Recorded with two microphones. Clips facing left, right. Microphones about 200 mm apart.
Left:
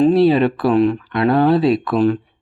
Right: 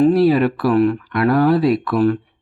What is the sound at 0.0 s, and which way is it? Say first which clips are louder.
Speech: left 1 dB; 25° left (ahead or behind).